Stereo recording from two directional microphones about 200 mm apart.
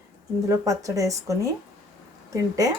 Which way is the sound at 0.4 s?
15° right (ahead or behind).